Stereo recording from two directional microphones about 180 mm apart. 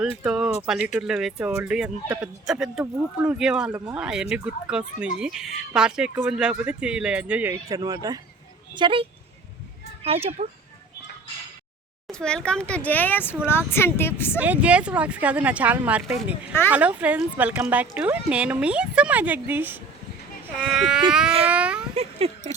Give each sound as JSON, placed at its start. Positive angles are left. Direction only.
{"t": 0.2, "sound": "a child's voice", "side_deg": -5}
{"t": 12.0, "sound": "speech", "side_deg": 5}
{"t": 14.3, "sound": "speech", "side_deg": -10}
{"t": 22.2, "sound": "a child's voice", "side_deg": -35}